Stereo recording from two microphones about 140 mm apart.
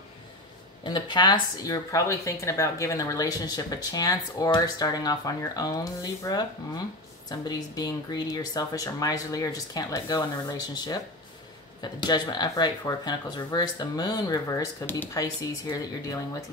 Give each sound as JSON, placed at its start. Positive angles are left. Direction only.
{"t": 0.8, "sound": "speech", "side_deg": 30}